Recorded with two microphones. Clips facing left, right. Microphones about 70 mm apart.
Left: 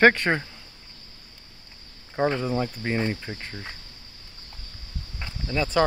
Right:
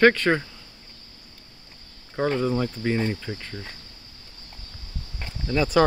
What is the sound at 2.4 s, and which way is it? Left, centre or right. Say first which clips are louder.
Cricket: right 3 dB; centre.